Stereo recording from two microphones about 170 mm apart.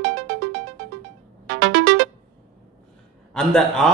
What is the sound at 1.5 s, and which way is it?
Music, 90° right.